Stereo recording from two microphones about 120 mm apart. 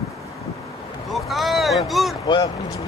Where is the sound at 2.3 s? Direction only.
35° left (ahead or behind).